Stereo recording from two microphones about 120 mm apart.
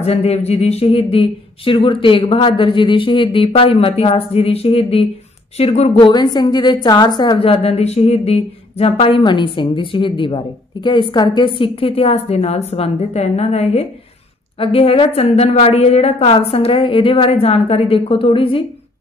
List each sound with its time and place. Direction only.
0.0 s a woman's voice: 60° left (ahead or behind)
6.0 s a woman's voice: 35° left (ahead or behind)
7.3 s a woman's voice: 50° left (ahead or behind)